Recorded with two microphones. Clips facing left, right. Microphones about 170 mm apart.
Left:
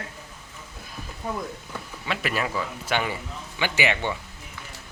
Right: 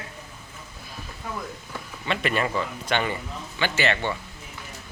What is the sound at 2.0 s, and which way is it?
Speech, 5° left (ahead or behind).